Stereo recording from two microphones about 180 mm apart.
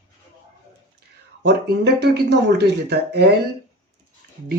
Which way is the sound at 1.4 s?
70° right (ahead or behind).